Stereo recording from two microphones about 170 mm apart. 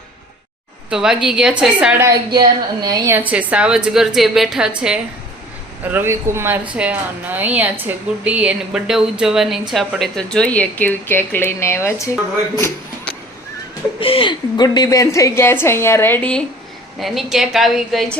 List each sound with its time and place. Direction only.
0.9 s a woman's voice: 5° right (ahead or behind)
2.0 s a woman's voice: 25° right (ahead or behind)
3.2 s a woman's voice: 5° right (ahead or behind); by 12.1 s 15° left (ahead or behind)
12.5 s a sound: 15° left (ahead or behind)
14.0 s a woman's voice: 30° left (ahead or behind); by 16.4 s 10° left (ahead or behind)
17.0 s a woman's voice: centre (ahead or behind)